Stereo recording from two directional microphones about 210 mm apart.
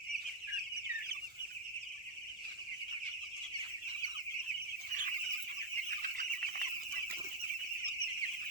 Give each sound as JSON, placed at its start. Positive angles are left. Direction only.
{"t": 6.1, "sound": "chicken", "side_deg": -40}